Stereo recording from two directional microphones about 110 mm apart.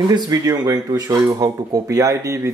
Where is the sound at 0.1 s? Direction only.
35° right (ahead or behind).